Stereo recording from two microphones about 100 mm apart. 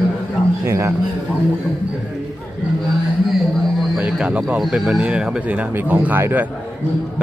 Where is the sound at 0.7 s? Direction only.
30° right (ahead or behind).